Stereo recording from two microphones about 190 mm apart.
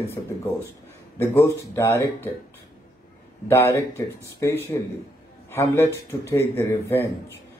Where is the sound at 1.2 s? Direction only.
15° left (ahead or behind).